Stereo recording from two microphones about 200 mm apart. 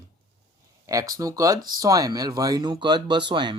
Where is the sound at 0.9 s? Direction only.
15° right (ahead or behind).